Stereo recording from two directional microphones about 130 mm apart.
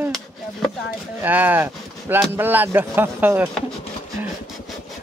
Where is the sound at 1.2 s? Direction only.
15° right (ahead or behind).